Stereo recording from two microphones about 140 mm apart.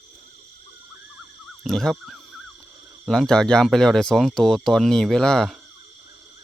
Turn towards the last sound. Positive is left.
turn(degrees=5)  # may be behind; listen again after turning